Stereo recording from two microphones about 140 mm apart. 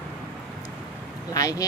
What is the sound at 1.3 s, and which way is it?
Vehicle, 25° left (ahead or behind).